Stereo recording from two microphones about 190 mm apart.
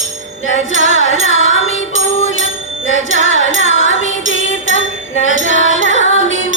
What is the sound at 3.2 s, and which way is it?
Music, 90° left.